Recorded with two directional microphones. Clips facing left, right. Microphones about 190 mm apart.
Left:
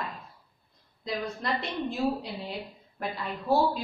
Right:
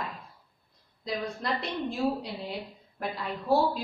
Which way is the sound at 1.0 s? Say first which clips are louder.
Even; centre (ahead or behind).